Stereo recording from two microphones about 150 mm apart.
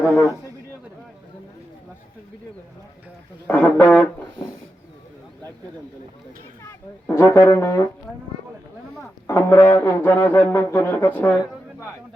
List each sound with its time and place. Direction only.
3.4 s speech: 10° left (ahead or behind)
6.6 s speech: 20° left (ahead or behind)
9.2 s speech: 20° left (ahead or behind)